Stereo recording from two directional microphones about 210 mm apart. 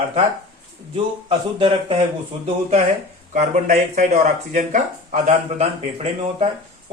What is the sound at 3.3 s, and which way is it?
A man's voice, 35° right (ahead or behind).